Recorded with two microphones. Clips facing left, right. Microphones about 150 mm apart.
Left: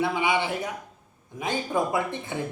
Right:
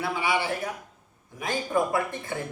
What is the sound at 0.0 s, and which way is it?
Speech, 20° left (ahead or behind).